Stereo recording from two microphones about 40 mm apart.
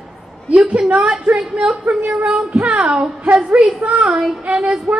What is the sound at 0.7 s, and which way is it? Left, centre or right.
Speech, right.